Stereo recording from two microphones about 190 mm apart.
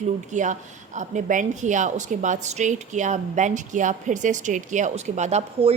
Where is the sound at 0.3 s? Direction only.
40° right (ahead or behind).